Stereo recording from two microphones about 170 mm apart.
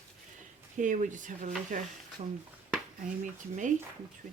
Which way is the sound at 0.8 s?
50° right (ahead or behind).